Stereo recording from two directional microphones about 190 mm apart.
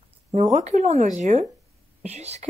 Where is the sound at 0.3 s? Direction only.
35° right (ahead or behind).